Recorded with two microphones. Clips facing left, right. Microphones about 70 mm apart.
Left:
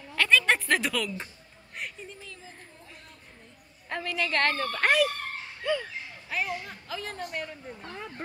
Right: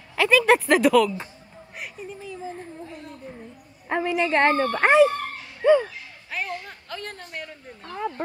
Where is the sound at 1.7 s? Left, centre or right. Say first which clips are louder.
Right 3 dB; centre.